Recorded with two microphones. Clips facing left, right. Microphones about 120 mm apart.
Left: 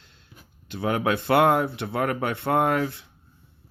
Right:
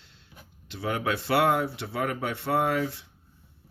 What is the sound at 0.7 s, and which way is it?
Speech, 50° left (ahead or behind).